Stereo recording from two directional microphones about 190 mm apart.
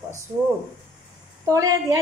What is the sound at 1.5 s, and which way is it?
Speech, 20° right (ahead or behind).